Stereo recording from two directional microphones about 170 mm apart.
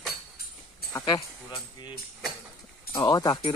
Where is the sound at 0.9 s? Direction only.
25° left (ahead or behind).